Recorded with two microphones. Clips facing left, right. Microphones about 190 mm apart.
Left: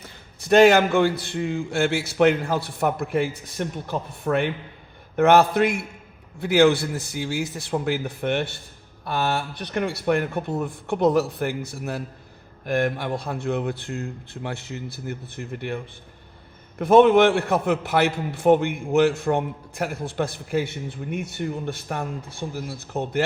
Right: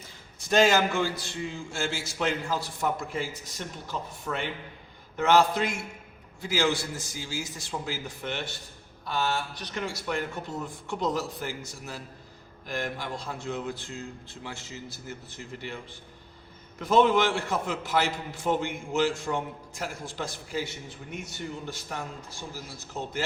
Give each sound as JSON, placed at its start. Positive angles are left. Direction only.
{"t": 0.0, "sound": "a man's voice", "side_deg": 60}